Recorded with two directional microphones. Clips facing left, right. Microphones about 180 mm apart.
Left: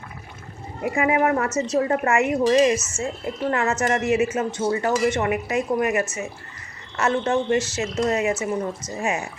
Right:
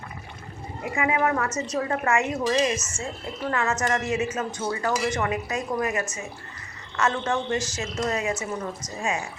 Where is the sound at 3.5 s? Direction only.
25° left (ahead or behind).